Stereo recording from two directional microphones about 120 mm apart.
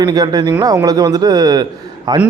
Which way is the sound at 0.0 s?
30° right (ahead or behind).